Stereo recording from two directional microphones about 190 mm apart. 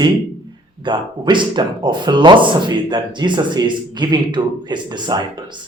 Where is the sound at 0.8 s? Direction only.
25° right (ahead or behind).